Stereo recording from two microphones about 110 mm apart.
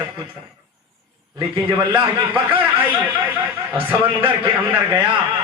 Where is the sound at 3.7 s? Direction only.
15° right (ahead or behind).